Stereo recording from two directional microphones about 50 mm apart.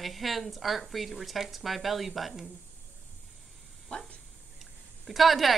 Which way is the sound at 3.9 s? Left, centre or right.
Left.